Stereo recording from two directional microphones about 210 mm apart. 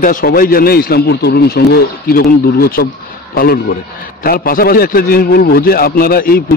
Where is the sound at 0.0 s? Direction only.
40° left (ahead or behind).